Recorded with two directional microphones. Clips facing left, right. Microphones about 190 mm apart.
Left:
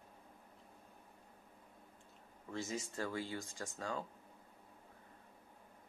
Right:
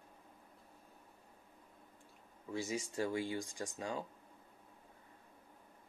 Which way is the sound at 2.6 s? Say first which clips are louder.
Right 4 dB; 15° right (ahead or behind).